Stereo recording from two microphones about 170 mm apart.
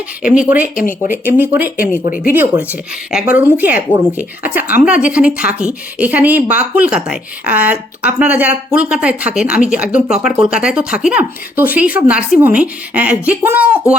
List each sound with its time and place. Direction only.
0.4 s speech: 10° right (ahead or behind)
0.8 s speech: 55° left (ahead or behind)
1.1 s speech: 10° right (ahead or behind)
2.0 s speech: 50° left (ahead or behind)
2.3 s speech: 10° right (ahead or behind)